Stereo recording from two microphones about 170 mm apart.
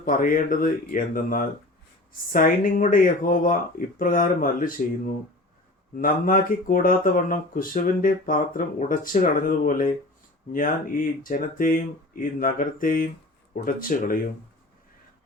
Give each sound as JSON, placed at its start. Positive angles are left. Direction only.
{"t": 0.0, "sound": "speech", "side_deg": 55}
{"t": 6.0, "sound": "speech", "side_deg": 55}